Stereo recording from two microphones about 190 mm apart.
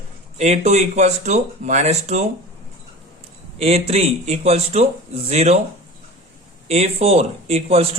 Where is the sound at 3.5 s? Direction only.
35° right (ahead or behind).